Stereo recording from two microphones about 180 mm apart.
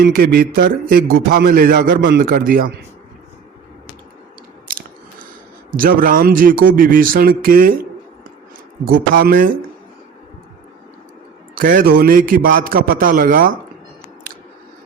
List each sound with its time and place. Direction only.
0.0 s a man's voice: 55° right (ahead or behind)
5.7 s speech: 50° right (ahead or behind)
8.8 s speech: 55° right (ahead or behind)
11.5 s speech: 50° right (ahead or behind)